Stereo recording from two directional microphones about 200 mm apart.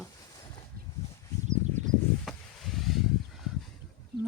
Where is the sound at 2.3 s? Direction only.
Centre (ahead or behind).